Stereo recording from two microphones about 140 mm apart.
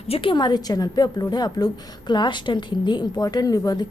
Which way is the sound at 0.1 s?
40° left (ahead or behind).